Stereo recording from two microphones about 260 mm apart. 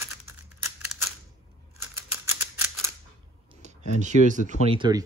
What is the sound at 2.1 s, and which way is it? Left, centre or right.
Typewriter, centre.